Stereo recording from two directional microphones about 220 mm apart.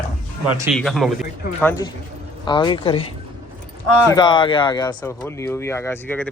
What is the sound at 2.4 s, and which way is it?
Speech, 20° left (ahead or behind).